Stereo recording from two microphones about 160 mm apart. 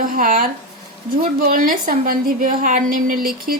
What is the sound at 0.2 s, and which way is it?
A woman's voice, 60° right (ahead or behind).